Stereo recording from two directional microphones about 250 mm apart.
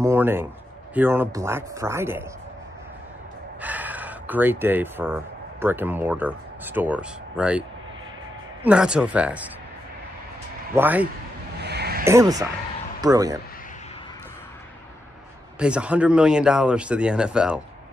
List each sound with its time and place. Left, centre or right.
0.0 s a sound: centre
0.9 s speech: centre
3.6 s speech: centre
8.6 s speech: centre
10.7 s speech: centre
11.6 s a sound: right
12.0 s speech: centre
15.6 s speech: centre